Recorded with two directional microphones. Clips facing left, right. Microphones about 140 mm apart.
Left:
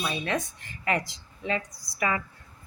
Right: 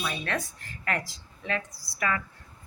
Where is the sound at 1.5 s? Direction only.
15° left (ahead or behind).